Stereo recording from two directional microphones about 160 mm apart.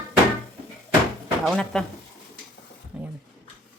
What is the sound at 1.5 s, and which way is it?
Speech, 5° left (ahead or behind).